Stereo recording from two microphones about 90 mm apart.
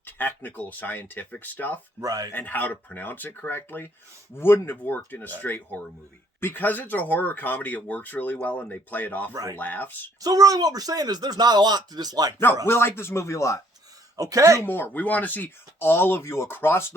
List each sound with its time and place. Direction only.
0.0 s speech: 20° left (ahead or behind)
2.0 s speech: 40° right (ahead or behind)
2.3 s speech: 20° left (ahead or behind)
9.3 s speech: 40° right (ahead or behind)
9.6 s speech: 20° left (ahead or behind)
10.2 s speech: 45° right (ahead or behind)
12.6 s speech: 25° left (ahead or behind)
14.2 s speech: 40° right (ahead or behind)
14.6 s speech: 20° left (ahead or behind)